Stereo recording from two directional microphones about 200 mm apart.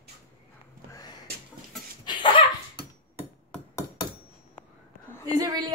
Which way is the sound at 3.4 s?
15° left (ahead or behind).